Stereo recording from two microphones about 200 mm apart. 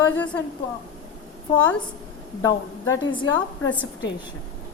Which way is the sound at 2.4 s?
15° left (ahead or behind).